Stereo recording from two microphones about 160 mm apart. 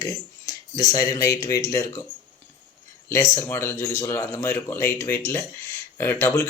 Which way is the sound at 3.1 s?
20° left (ahead or behind).